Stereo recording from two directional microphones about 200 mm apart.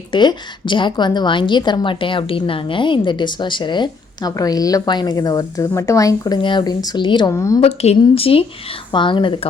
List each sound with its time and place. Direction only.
0.1 s a woman's voice: 25° left (ahead or behind)
7.6 s a woman's voice: 30° left (ahead or behind)